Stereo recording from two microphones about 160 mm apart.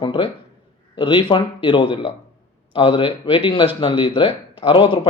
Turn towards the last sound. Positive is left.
turn(degrees=30)  # may be behind; listen again after turning